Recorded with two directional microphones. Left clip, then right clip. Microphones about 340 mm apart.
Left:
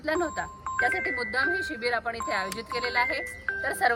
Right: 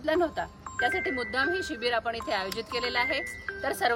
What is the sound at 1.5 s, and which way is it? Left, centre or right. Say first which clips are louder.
Speech: left 2 dB; right.